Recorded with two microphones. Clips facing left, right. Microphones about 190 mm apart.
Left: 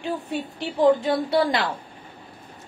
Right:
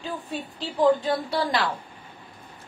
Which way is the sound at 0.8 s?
25° left (ahead or behind).